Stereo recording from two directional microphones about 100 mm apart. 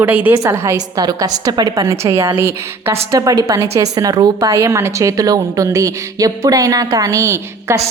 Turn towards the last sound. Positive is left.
turn(degrees=-30)  # may be behind; listen again after turning